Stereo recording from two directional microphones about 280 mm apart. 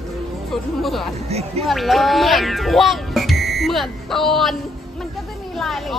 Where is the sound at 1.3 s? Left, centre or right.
Right.